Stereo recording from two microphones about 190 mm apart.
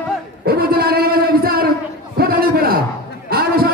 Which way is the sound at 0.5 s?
55° right (ahead or behind).